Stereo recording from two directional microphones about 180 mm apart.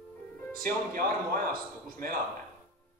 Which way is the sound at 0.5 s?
50° right (ahead or behind).